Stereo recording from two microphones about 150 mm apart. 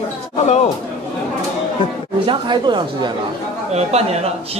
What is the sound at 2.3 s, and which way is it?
Speech, 30° right (ahead or behind).